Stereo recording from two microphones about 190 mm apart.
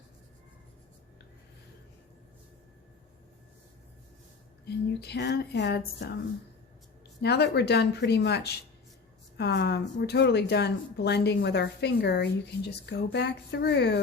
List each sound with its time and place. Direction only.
4.6 s speech: 60° left (ahead or behind)
7.2 s speech: 60° left (ahead or behind)